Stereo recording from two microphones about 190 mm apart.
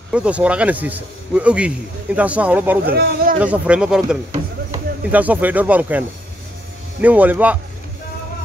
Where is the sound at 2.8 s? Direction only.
50° right (ahead or behind).